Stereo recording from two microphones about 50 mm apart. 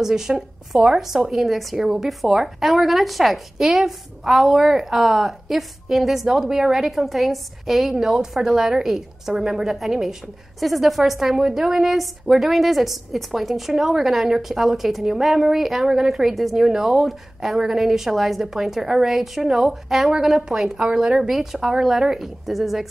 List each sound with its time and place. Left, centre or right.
0.0 s a woman's voice: centre